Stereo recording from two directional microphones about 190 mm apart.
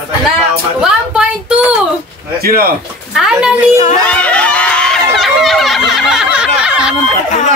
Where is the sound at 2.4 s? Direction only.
50° right (ahead or behind).